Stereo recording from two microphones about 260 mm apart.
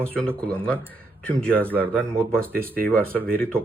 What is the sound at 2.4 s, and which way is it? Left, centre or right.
Speech, centre.